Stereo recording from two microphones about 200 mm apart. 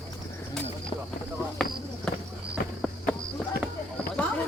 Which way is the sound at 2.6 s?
50° left (ahead or behind).